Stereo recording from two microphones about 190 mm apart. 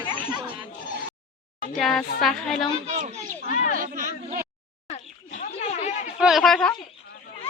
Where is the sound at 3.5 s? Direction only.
45° left (ahead or behind).